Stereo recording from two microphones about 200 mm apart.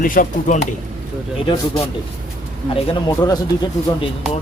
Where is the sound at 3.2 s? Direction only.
20° left (ahead or behind).